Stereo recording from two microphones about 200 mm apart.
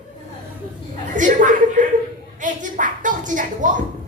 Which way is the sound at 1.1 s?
40° right (ahead or behind).